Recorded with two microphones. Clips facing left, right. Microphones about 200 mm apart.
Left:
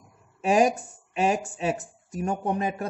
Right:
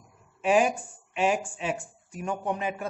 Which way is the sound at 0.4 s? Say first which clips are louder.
Left 2 dB; 40° left (ahead or behind).